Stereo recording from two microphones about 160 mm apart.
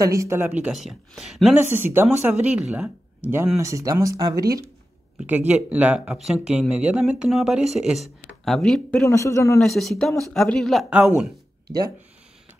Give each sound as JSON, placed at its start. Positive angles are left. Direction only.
{"t": 0.0, "sound": "speech", "side_deg": -20}
{"t": 1.6, "sound": "speech", "side_deg": -15}
{"t": 5.2, "sound": "speech", "side_deg": -10}
{"t": 9.0, "sound": "speech", "side_deg": 20}
{"t": 9.6, "sound": "speech", "side_deg": 0}